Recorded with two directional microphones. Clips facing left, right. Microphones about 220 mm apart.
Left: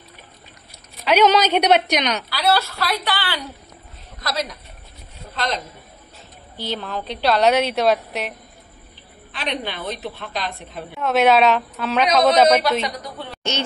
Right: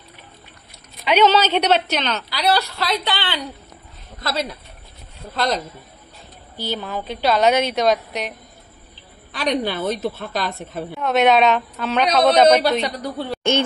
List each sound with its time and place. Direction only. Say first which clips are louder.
1.0 s a woman's voice: even; 10° left (ahead or behind)
2.2 s a woman's voice: even; 20° right (ahead or behind)
6.5 s a woman's voice: right 1 dB; centre (ahead or behind)
9.3 s a woman's voice: right 6 dB; 40° right (ahead or behind)
11.0 s a woman's voice: even; centre (ahead or behind)
12.8 s a woman's voice: right 4 dB; 35° right (ahead or behind)